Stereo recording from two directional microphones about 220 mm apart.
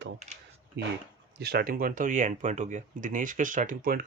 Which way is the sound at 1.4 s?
45° right (ahead or behind).